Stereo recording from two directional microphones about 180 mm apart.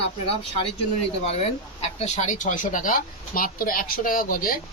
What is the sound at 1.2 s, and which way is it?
Speech, 35° left (ahead or behind).